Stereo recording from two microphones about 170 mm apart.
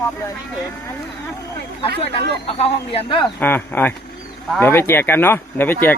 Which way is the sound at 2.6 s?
30° left (ahead or behind).